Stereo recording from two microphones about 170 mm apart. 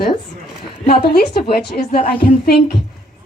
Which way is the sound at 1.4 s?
60° left (ahead or behind).